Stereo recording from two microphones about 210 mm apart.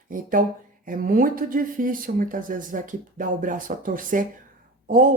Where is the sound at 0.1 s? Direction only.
40° right (ahead or behind).